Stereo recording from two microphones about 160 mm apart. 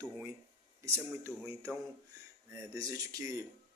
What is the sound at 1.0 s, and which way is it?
A man's voice, 15° right (ahead or behind).